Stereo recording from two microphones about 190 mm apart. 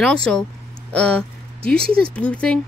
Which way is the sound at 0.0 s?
5° left (ahead or behind).